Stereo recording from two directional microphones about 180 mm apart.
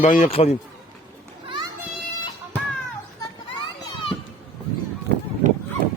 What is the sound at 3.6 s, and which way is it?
Children playing, 25° left (ahead or behind).